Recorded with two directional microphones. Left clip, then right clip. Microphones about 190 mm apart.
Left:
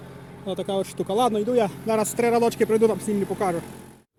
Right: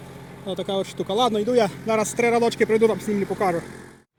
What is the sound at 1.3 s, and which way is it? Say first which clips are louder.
Speech: right 2 dB; 5° right (ahead or behind).